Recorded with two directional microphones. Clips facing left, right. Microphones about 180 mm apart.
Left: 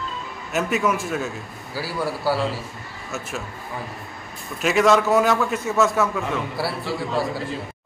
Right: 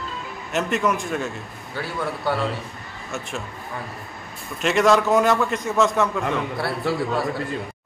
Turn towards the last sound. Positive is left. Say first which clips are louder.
# even
turn(degrees=0)  # may be behind; listen again after turning